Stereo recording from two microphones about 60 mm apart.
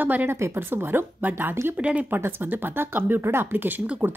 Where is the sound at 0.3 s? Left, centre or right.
Right.